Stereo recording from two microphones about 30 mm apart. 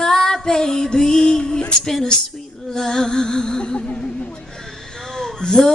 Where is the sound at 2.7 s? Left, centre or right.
Centre.